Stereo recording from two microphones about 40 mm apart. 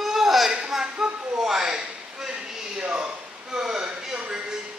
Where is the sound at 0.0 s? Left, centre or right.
Centre.